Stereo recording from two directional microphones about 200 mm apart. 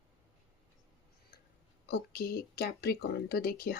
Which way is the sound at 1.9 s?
50° left (ahead or behind).